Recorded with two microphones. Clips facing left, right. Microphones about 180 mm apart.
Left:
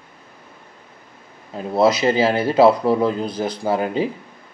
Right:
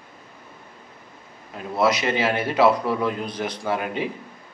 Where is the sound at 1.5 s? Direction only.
30° left (ahead or behind).